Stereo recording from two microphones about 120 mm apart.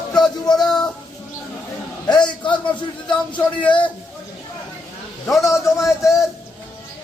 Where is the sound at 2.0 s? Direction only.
40° left (ahead or behind).